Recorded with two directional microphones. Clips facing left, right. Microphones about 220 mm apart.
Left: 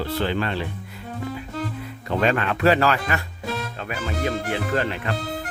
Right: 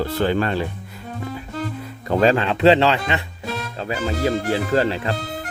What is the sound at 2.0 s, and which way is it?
Speech, 35° right (ahead or behind).